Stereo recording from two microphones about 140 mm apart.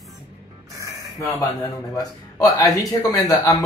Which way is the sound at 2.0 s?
25° left (ahead or behind).